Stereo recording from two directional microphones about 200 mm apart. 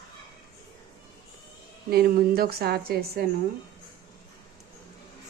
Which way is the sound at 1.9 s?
50° right (ahead or behind).